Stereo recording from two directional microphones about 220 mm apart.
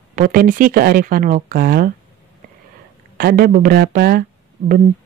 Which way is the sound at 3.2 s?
40° right (ahead or behind).